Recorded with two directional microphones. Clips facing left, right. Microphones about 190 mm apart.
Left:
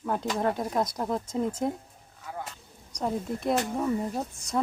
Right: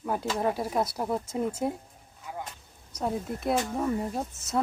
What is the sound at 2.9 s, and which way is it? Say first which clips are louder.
Speech: left 1 dB; 5° right (ahead or behind).